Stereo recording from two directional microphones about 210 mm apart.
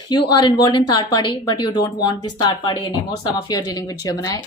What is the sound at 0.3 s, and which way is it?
A woman's voice, 20° left (ahead or behind).